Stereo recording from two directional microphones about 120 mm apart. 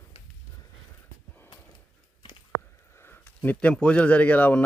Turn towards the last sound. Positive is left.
turn(degrees=10)  # may be behind; listen again after turning